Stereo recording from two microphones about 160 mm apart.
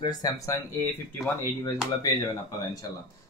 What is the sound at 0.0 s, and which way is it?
Speech, 25° left (ahead or behind).